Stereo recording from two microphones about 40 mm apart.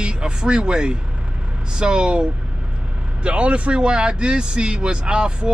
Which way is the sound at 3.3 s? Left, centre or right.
Right.